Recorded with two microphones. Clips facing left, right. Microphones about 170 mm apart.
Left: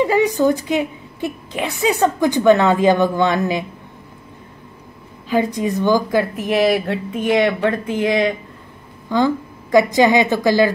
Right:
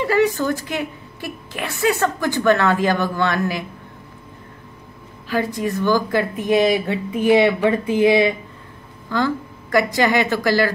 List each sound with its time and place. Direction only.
0.0 s a woman's voice: 15° left (ahead or behind)
5.3 s a woman's voice: 20° left (ahead or behind)
6.4 s speech: centre (ahead or behind)
9.1 s a woman's voice: 20° left (ahead or behind)